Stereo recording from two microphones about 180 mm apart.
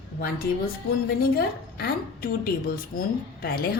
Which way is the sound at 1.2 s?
60° left (ahead or behind).